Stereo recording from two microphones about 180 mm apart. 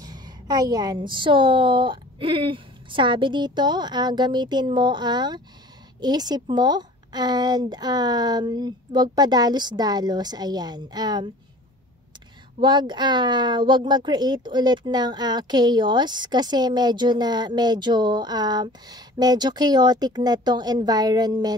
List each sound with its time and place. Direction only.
0.0 s speech: 20° right (ahead or behind)
12.5 s speech: 25° right (ahead or behind)